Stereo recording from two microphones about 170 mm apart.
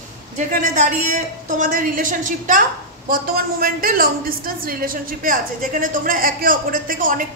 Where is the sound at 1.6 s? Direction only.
50° right (ahead or behind).